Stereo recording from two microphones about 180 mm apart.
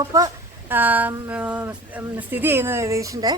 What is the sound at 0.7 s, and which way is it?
Speech, 10° right (ahead or behind).